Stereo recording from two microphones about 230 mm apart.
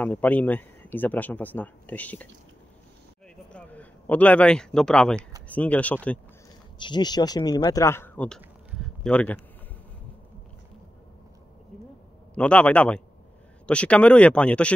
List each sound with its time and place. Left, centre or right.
0.0 s speech: centre
3.5 s speech: centre
6.8 s speech: centre
8.4 s a sound: centre
12.4 s speech: centre